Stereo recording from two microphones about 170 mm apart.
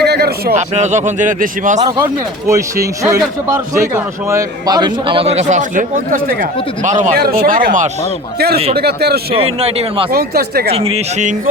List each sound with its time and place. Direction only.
0.0 s a sound: 70° right (ahead or behind)
0.5 s speech: 45° right (ahead or behind)
2.5 s a man's voice: 20° right (ahead or behind); by 7.1 s 45° right (ahead or behind)
7.2 s speech: 60° right (ahead or behind)
8.5 s speech: 35° right (ahead or behind)
8.8 s speech: 70° right (ahead or behind)
9.3 s speech: 35° right (ahead or behind)
10.1 s speech: 65° right (ahead or behind)
10.7 s speech: 35° right (ahead or behind)